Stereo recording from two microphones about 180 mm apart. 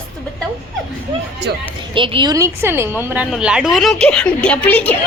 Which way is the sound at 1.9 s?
30° right (ahead or behind).